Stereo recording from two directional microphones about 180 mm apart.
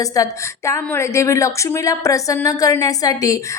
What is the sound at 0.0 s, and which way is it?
A woman's voice, 20° left (ahead or behind).